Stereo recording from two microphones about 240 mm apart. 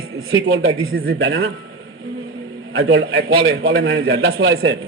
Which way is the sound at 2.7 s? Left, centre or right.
Right.